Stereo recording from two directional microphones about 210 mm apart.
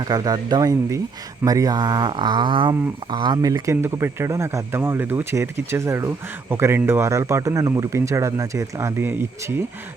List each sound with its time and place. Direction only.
0.0 s speech: 20° right (ahead or behind)